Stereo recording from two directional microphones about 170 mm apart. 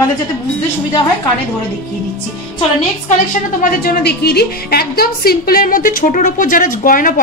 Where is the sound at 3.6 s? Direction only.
70° left (ahead or behind).